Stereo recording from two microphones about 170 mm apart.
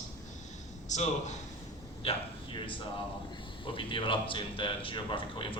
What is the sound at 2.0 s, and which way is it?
Speech, 30° left (ahead or behind).